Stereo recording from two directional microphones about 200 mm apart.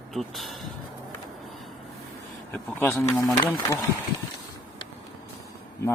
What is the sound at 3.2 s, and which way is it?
Speech, 20° left (ahead or behind).